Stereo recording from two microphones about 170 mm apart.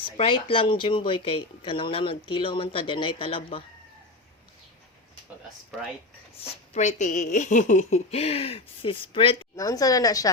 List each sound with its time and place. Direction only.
0.0 s speech: 30° left (ahead or behind)
6.4 s speech: 45° left (ahead or behind)
9.6 s a woman's voice: 20° left (ahead or behind)